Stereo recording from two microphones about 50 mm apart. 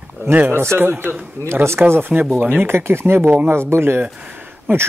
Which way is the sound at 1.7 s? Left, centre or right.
Right.